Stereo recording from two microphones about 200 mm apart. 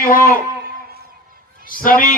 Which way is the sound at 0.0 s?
45° left (ahead or behind).